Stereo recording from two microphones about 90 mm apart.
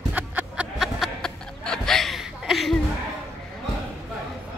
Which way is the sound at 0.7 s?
Centre (ahead or behind).